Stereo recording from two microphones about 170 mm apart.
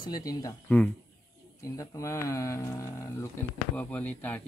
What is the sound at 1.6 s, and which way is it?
Speech, 20° left (ahead or behind).